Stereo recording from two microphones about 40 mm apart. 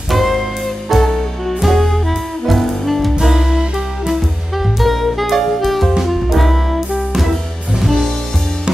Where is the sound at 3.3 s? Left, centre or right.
Centre.